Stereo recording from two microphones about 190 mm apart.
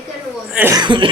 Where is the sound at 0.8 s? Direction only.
25° right (ahead or behind).